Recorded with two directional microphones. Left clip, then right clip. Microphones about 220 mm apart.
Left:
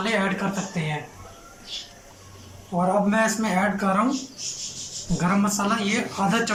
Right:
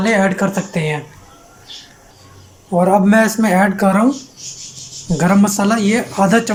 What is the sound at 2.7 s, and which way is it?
Speech, 40° right (ahead or behind).